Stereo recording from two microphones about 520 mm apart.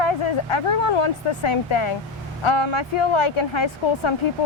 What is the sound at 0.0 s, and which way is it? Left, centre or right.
Speech, left.